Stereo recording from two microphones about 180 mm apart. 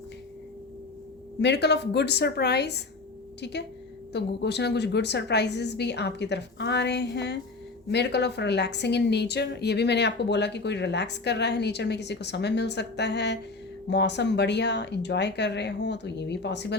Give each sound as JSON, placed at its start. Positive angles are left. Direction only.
{"t": 1.4, "sound": "a woman's voice", "side_deg": 70}